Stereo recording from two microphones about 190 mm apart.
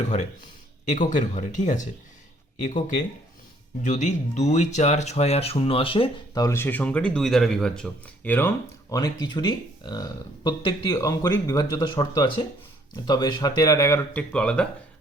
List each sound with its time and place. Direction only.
0.9 s speech: 40° left (ahead or behind); by 8.4 s 10° left (ahead or behind)
8.9 s speech: 20° left (ahead or behind)